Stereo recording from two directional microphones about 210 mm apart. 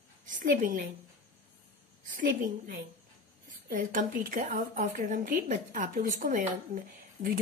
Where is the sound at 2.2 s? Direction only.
40° right (ahead or behind).